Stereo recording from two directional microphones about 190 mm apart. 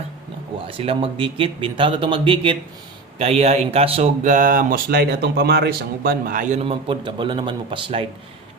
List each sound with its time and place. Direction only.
0.7 s speech: 30° right (ahead or behind); by 6.6 s 45° right (ahead or behind)
6.7 s speech: 30° right (ahead or behind)